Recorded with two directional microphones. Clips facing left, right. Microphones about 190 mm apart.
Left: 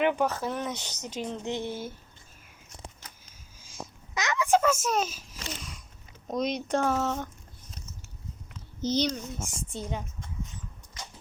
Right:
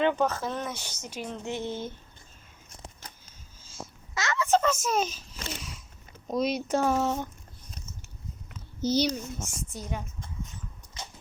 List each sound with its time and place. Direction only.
0.0 s speech: 15° left (ahead or behind)
3.6 s a sound: 15° left (ahead or behind)
6.2 s speech: 5° right (ahead or behind)
8.8 s speech: 10° right (ahead or behind)
9.6 s a woman's voice: 25° left (ahead or behind)
11.0 s dog: 25° right (ahead or behind)